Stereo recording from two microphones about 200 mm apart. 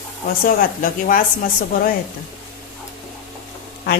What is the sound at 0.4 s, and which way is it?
Speech, 45° left (ahead or behind).